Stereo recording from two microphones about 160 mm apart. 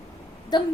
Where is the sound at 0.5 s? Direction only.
25° left (ahead or behind).